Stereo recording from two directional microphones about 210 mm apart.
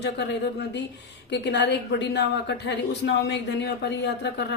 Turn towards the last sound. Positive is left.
turn(degrees=55)  # may be behind; listen again after turning